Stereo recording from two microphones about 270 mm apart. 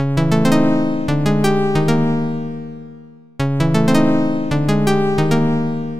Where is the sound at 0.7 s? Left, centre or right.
Centre.